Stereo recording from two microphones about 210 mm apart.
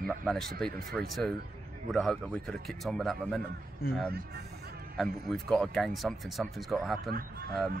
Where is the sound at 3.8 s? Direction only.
45° left (ahead or behind).